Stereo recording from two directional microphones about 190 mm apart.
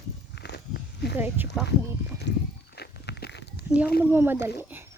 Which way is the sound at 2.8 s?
60° left (ahead or behind).